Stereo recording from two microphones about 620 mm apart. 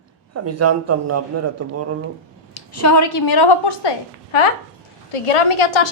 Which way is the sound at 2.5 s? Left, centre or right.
Left.